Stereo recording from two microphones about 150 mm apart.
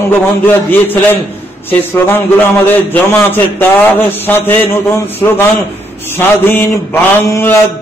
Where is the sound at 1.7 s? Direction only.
15° left (ahead or behind).